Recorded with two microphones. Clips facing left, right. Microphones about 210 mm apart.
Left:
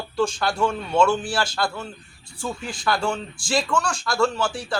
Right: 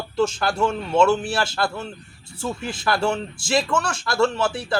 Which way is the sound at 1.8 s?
25° right (ahead or behind).